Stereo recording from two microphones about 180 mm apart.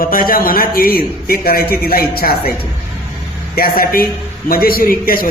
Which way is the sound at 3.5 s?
55° left (ahead or behind).